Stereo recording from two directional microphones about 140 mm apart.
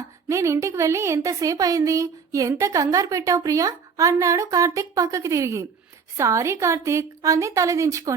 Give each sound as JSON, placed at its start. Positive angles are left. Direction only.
{"t": 0.3, "sound": "a woman's voice", "side_deg": -20}